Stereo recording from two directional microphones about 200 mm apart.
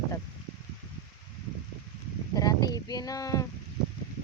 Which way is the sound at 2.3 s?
20° left (ahead or behind).